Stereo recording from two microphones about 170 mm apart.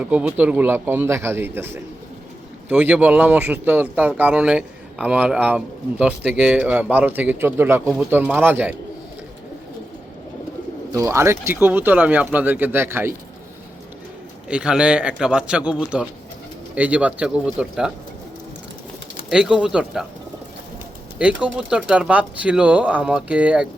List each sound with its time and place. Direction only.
0.0 s speech: 10° right (ahead or behind)
10.9 s speech: 15° right (ahead or behind)
14.4 s a man's voice: 5° right (ahead or behind)
19.3 s a man's voice: 5° right (ahead or behind)
21.2 s speech: 5° right (ahead or behind)